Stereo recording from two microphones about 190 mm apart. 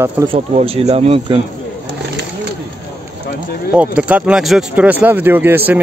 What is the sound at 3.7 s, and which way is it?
Speech, 5° right (ahead or behind).